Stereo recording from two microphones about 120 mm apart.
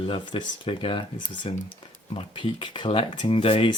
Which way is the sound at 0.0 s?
45° left (ahead or behind).